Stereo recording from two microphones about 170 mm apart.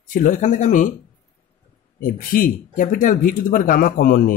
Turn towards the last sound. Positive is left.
turn(degrees=55)  # may be behind; listen again after turning